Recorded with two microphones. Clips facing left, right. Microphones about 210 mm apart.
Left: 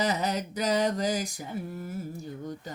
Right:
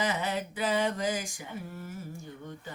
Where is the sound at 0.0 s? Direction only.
40° left (ahead or behind).